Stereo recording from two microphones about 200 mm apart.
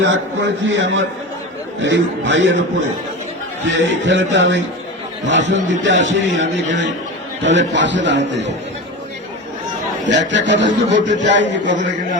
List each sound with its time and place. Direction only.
0.0 s a man's voice: 70° right (ahead or behind)
3.8 s a man's voice: 65° right (ahead or behind)
10.0 s a man's voice: 65° right (ahead or behind)